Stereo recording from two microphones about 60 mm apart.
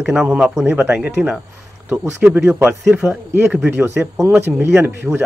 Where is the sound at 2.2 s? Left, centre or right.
Right.